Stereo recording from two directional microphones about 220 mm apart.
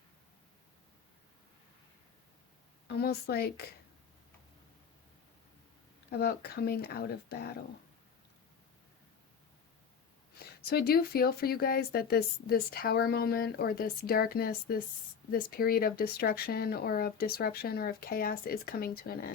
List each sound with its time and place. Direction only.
2.8 s speech: 45° left (ahead or behind)
6.1 s speech: 45° left (ahead or behind)
10.3 s speech: 45° left (ahead or behind)